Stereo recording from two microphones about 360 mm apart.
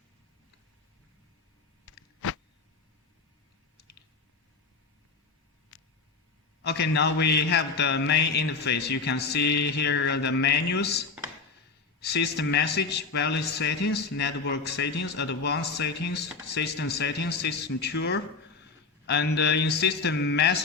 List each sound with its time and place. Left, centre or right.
6.6 s a man's voice: left